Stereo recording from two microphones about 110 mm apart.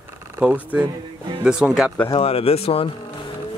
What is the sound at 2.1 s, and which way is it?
Speech, 60° left (ahead or behind).